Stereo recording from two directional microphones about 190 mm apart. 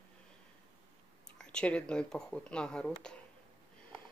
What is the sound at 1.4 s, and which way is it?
Speech, 5° left (ahead or behind).